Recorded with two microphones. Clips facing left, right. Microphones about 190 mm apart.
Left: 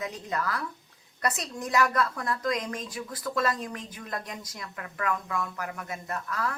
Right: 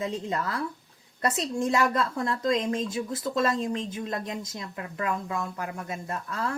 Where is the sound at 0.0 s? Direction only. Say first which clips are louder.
Right 3 dB; 25° right (ahead or behind).